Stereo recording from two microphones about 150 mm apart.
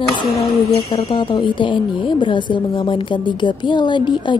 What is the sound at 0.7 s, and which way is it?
A woman's voice, 35° left (ahead or behind).